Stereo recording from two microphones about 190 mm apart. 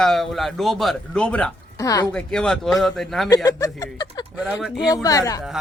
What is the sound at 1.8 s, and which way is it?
Speech, 20° left (ahead or behind).